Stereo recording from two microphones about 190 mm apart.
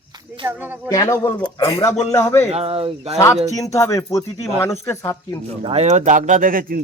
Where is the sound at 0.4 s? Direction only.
10° right (ahead or behind).